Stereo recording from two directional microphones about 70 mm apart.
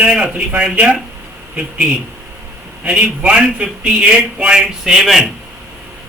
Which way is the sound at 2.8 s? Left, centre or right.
Centre.